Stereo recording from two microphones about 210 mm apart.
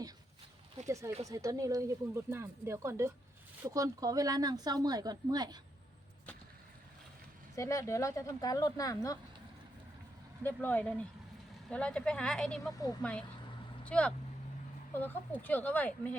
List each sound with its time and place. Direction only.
0.9 s a woman's voice: 15° right (ahead or behind)
7.5 s speech: 15° left (ahead or behind)
10.4 s speech: 10° left (ahead or behind)